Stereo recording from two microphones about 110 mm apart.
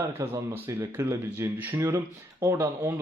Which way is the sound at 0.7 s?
20° right (ahead or behind).